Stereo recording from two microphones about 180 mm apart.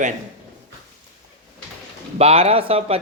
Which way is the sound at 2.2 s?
35° right (ahead or behind).